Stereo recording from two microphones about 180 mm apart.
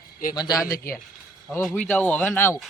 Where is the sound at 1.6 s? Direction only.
5° left (ahead or behind).